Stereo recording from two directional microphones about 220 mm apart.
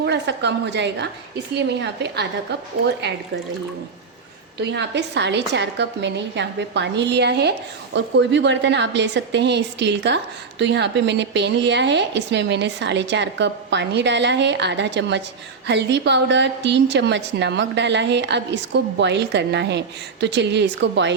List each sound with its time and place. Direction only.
0.0 s a woman's voice: 50° right (ahead or behind)
4.6 s a woman's voice: 50° right (ahead or behind)